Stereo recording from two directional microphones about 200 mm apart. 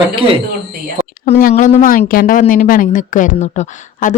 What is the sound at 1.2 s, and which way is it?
A woman's voice, 45° left (ahead or behind).